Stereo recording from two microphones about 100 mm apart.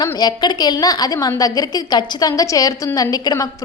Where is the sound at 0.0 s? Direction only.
45° left (ahead or behind).